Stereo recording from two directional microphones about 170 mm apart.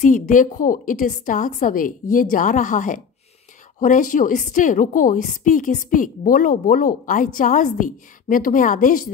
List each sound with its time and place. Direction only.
0.0 s a woman's voice: 50° left (ahead or behind)